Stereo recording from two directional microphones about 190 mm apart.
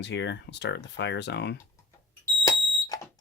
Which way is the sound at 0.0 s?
65° left (ahead or behind).